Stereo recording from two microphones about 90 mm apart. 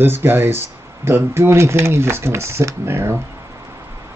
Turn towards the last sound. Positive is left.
turn(degrees=-30)  # may be behind; listen again after turning